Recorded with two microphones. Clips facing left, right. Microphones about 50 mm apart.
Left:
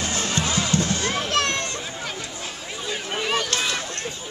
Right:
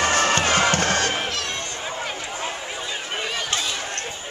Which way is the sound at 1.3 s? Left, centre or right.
Left.